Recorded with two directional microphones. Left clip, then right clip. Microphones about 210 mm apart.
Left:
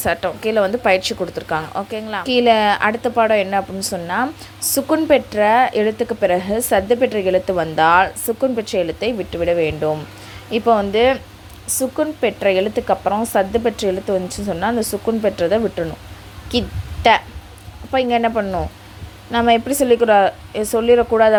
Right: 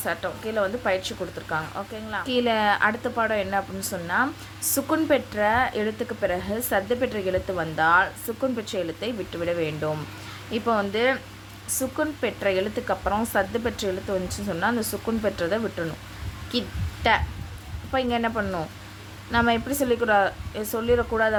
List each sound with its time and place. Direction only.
0.0 s a woman's voice: 30° left (ahead or behind)
16.5 s a sound: 25° left (ahead or behind)
17.9 s a woman's voice: 25° left (ahead or behind)